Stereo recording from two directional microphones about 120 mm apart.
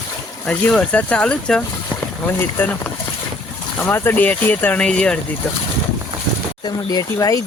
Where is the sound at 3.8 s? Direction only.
20° left (ahead or behind).